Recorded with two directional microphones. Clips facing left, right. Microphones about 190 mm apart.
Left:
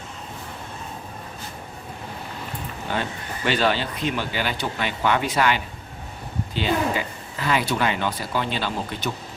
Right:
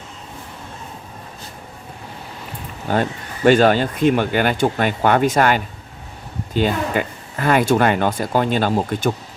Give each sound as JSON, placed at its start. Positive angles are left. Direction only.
{"t": 2.9, "sound": "speech", "side_deg": -45}